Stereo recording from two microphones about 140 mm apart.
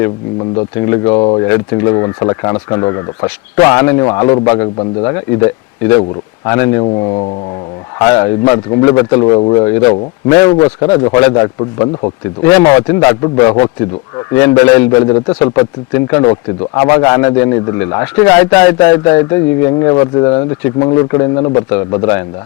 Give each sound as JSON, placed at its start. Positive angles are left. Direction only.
{"t": 0.5, "sound": "a man's voice", "side_deg": 20}
{"t": 1.5, "sound": "a man's voice", "side_deg": 20}
{"t": 5.0, "sound": "a man's voice", "side_deg": 20}
{"t": 6.8, "sound": "speech", "side_deg": 35}
{"t": 7.9, "sound": "a man's voice", "side_deg": 20}
{"t": 10.2, "sound": "a man's voice", "side_deg": 25}
{"t": 10.6, "sound": "speech", "side_deg": 40}
{"t": 11.1, "sound": "a man's voice", "side_deg": 15}
{"t": 11.3, "sound": "speech", "side_deg": 30}
{"t": 12.4, "sound": "a man's voice", "side_deg": 20}
{"t": 15.9, "sound": "a man's voice", "side_deg": 20}